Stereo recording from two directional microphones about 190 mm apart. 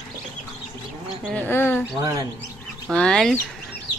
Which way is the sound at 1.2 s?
5° left (ahead or behind).